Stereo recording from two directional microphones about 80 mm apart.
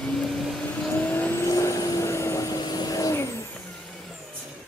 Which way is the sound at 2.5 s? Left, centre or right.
Left.